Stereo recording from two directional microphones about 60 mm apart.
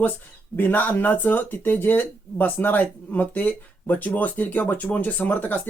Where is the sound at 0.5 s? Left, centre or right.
Left.